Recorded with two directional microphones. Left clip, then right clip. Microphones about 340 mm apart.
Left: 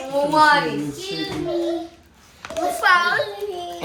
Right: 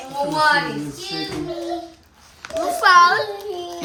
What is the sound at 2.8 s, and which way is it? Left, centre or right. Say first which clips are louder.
Speech: right 5 dB; centre.